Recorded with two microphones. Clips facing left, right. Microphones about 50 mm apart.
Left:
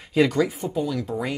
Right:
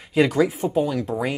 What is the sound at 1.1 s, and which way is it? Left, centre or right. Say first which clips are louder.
Speech: right 2 dB; centre.